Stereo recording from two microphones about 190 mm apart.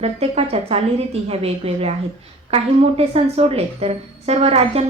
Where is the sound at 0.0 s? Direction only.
35° right (ahead or behind).